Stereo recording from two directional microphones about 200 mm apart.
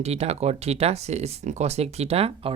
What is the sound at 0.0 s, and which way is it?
Speech, 30° right (ahead or behind).